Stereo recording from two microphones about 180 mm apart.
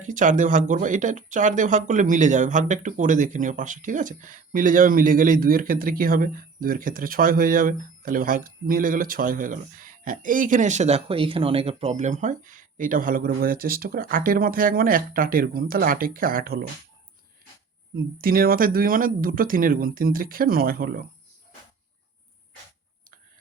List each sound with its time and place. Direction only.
0.0 s speech: 45° right (ahead or behind)
18.2 s speech: 55° right (ahead or behind)